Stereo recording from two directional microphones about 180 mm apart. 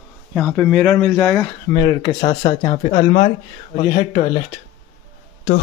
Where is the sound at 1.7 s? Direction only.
30° left (ahead or behind).